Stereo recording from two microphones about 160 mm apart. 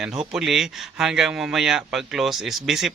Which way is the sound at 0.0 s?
5° right (ahead or behind).